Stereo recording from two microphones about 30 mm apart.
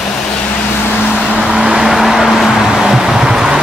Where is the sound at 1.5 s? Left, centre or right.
Right.